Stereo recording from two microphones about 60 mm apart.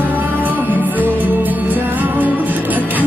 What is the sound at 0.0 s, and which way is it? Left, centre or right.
Music, right.